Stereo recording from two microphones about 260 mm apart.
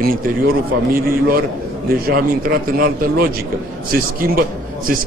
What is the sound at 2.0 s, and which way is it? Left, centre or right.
A man's voice, right.